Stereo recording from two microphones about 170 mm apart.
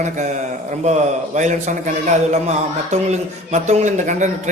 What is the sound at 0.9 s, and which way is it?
A man's voice, 40° right (ahead or behind).